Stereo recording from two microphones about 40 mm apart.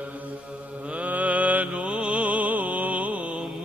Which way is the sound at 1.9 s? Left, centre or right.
Right.